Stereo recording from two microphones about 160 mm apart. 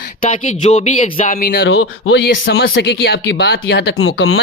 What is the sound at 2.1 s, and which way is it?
Speech, 85° left.